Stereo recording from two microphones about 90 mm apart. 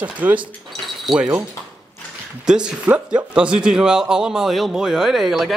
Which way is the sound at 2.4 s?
10° right (ahead or behind).